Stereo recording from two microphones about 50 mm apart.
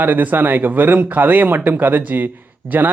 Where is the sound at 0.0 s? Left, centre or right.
Right.